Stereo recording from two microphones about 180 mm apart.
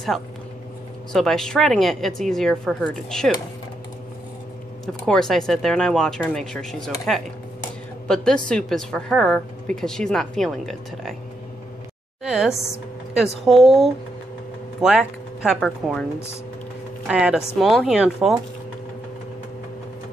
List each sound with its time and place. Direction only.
1.1 s a woman's voice: centre (ahead or behind)
4.8 s a woman's voice: 5° left (ahead or behind)
8.1 s a woman's voice: 5° left (ahead or behind)
12.2 s a sound: 5° right (ahead or behind)
13.5 s a woman's voice: centre (ahead or behind)
17.1 s a woman's voice: 5° right (ahead or behind)